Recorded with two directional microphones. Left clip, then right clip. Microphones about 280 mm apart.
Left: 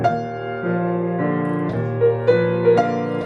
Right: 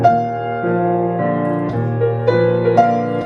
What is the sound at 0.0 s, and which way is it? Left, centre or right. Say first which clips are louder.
Music: right 7 dB; centre.